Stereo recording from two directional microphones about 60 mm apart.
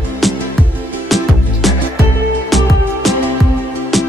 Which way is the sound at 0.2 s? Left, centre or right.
Centre.